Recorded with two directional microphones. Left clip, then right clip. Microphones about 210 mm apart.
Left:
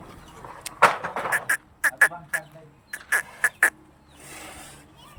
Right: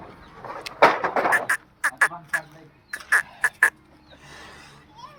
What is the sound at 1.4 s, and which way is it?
Duck, 10° left (ahead or behind).